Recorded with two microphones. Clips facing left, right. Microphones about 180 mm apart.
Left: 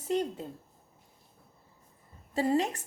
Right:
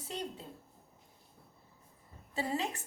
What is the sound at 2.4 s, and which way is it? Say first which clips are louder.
Speech: left 8 dB; 40° left (ahead or behind).